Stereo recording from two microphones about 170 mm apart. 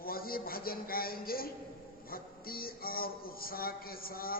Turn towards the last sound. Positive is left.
turn(degrees=60)  # may be behind; listen again after turning